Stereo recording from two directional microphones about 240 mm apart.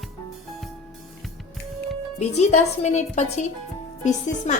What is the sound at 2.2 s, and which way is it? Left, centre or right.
Speech, left.